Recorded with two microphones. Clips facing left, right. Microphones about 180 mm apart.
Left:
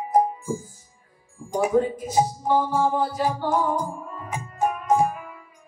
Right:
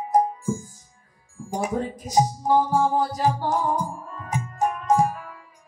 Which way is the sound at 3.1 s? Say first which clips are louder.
Right 1 dB; 40° right (ahead or behind).